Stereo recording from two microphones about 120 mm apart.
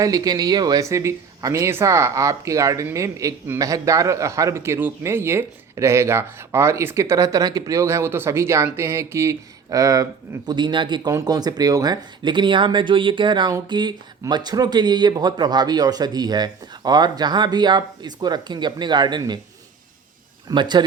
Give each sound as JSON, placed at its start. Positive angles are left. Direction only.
{"t": 0.0, "sound": "speech", "side_deg": -30}
{"t": 20.5, "sound": "speech", "side_deg": -40}